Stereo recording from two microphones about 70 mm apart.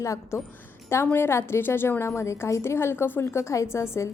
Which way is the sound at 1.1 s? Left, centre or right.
Left.